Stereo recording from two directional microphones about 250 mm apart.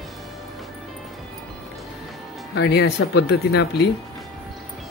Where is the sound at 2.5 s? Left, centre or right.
Left.